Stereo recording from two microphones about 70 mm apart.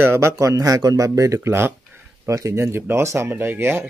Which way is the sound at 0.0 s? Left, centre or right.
Right.